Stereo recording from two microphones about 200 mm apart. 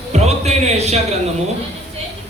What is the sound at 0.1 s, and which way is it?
Speech, 30° right (ahead or behind).